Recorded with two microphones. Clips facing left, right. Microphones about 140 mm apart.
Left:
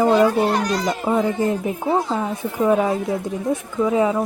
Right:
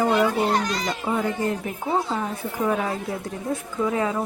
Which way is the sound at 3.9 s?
15° left (ahead or behind).